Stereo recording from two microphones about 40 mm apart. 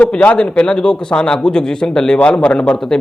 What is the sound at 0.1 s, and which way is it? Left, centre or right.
A man's voice, left.